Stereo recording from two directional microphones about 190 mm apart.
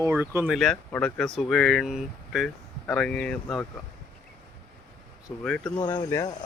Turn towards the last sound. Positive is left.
turn(degrees=20)  # may be behind; listen again after turning